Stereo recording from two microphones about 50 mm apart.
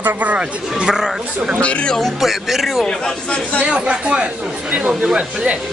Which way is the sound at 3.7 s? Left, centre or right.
Right.